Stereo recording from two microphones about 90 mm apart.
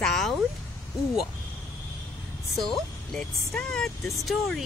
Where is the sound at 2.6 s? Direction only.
5° left (ahead or behind).